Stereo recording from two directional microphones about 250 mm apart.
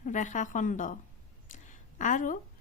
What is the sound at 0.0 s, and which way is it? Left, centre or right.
A woman's voice, left.